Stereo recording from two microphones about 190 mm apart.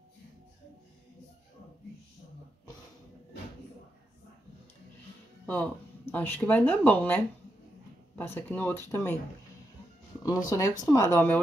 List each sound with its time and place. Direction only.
6.1 s speech: 10° left (ahead or behind)
8.2 s speech: 10° left (ahead or behind)
10.2 s speech: 20° left (ahead or behind)